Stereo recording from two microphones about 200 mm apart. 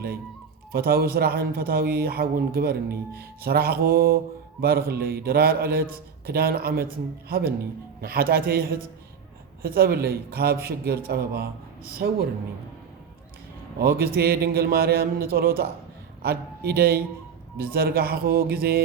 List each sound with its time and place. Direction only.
0.7 s speech: 50° right (ahead or behind)
13.7 s speech: 50° right (ahead or behind)